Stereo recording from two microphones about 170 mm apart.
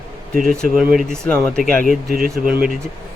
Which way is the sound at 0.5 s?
5° left (ahead or behind).